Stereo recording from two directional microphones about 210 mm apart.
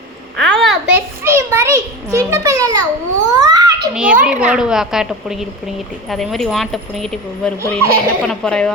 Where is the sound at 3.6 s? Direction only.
15° right (ahead or behind).